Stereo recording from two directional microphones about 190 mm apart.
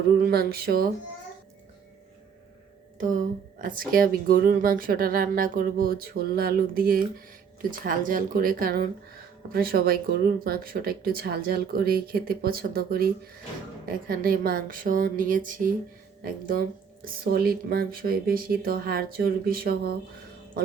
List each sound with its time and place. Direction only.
0.2 s speech: 55° right (ahead or behind)
3.6 s speech: 45° right (ahead or behind)